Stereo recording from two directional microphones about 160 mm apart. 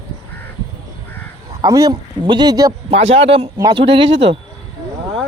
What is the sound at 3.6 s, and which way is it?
Speech, 25° right (ahead or behind).